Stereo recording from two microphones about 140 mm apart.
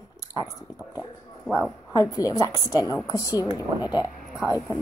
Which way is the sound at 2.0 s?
25° left (ahead or behind).